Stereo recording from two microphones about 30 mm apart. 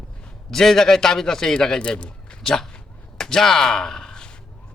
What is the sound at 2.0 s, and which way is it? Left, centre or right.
Speech, left.